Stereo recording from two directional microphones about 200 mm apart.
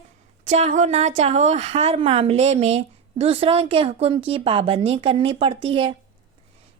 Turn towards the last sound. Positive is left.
turn(degrees=-25)  # may be behind; listen again after turning